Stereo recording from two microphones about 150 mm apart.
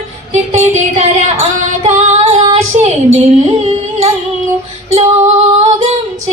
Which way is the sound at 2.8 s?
45° right (ahead or behind).